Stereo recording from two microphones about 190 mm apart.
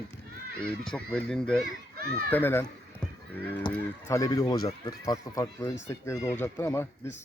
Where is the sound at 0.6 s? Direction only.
5° left (ahead or behind).